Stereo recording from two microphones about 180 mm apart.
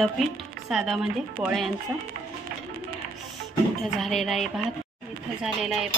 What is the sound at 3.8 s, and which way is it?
A woman's voice, centre (ahead or behind).